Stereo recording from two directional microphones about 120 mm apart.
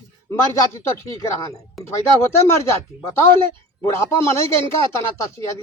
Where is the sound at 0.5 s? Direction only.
25° left (ahead or behind).